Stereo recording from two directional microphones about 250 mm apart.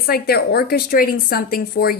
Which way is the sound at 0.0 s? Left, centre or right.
Left.